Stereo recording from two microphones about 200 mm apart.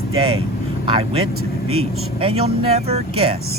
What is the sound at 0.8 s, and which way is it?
Speech, 30° right (ahead or behind).